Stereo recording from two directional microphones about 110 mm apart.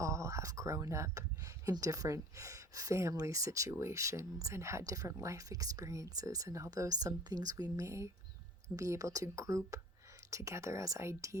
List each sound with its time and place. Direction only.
0.0 s speech: 30° right (ahead or behind)